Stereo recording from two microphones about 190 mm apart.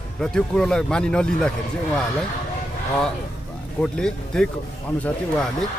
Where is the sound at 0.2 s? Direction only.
5° left (ahead or behind).